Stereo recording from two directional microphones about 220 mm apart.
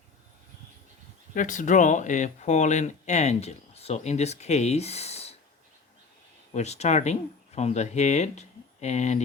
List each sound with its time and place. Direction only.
1.3 s speech: 35° left (ahead or behind)
6.5 s speech: 30° left (ahead or behind)